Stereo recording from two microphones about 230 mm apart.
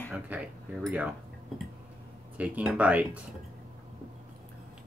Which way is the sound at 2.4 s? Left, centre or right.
Centre.